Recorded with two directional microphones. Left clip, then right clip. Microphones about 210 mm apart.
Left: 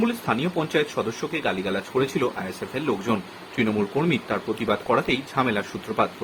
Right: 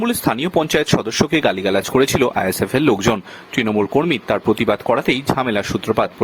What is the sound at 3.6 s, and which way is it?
Speech, 45° right (ahead or behind).